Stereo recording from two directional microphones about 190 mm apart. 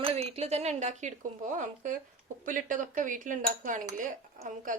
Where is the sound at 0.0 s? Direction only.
30° right (ahead or behind).